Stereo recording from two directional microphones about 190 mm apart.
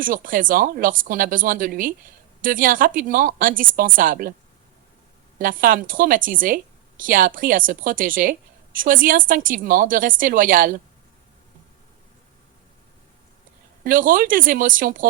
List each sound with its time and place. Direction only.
0.0 s a woman's voice: 45° right (ahead or behind)
5.4 s a woman's voice: 45° right (ahead or behind)
13.8 s a woman's voice: 45° right (ahead or behind)